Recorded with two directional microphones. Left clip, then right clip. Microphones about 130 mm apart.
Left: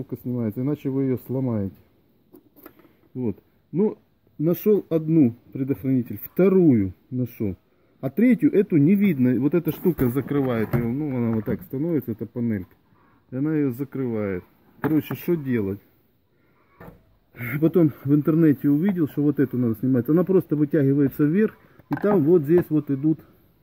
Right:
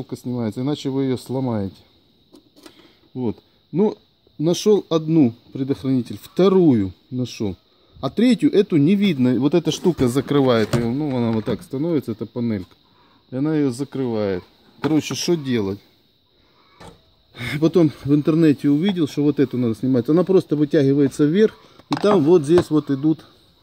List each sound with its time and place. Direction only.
0.1 s speech: 5° right (ahead or behind)
3.2 s speech: 30° right (ahead or behind)
5.8 s speech: 15° right (ahead or behind)
8.0 s speech: 10° right (ahead or behind); by 10.2 s 30° right (ahead or behind)
10.2 s speech: 55° right (ahead or behind); by 15.8 s 30° right (ahead or behind)
17.3 s speech: 20° right (ahead or behind)
17.6 s speech: 10° right (ahead or behind)
18.6 s speech: 20° right (ahead or behind)
19.7 s speech: centre (ahead or behind)
21.9 s speech: 75° right (ahead or behind)